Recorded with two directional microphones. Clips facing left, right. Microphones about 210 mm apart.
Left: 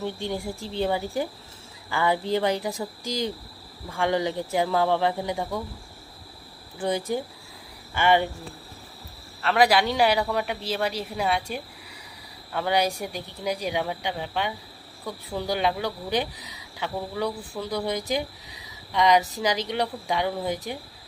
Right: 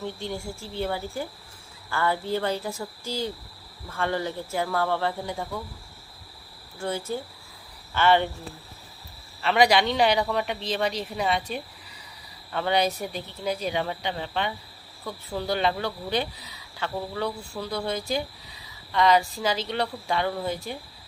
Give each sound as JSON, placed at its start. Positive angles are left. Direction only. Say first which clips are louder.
{"t": 0.0, "sound": "speech", "louder": "left 3 dB", "side_deg": 15}
{"t": 6.7, "sound": "speech", "louder": "left 4 dB", "side_deg": 15}
{"t": 9.4, "sound": "speech", "louder": "even", "side_deg": 0}